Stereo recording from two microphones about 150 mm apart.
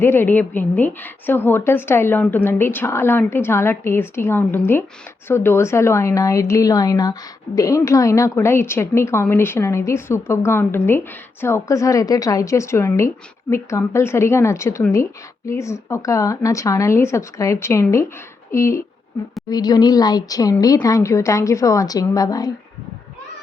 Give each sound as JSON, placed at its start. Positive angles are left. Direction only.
{"t": 0.0, "sound": "a woman's voice", "side_deg": 15}